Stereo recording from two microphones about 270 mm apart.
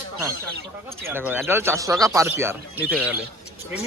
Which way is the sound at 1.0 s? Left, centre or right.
Centre.